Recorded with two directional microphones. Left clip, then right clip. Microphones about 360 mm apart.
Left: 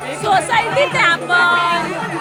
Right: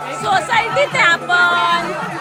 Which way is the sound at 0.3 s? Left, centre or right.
Centre.